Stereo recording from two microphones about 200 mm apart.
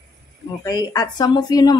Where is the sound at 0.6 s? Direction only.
20° left (ahead or behind).